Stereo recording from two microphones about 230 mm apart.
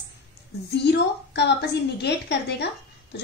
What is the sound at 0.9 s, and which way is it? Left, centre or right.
A woman's voice, left.